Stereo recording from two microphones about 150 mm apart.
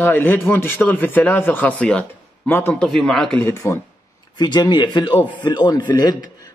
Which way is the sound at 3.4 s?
20° left (ahead or behind).